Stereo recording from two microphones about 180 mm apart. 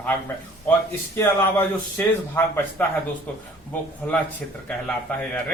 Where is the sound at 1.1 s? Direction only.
10° left (ahead or behind).